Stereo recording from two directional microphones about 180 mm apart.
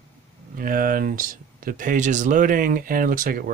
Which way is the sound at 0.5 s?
50° right (ahead or behind).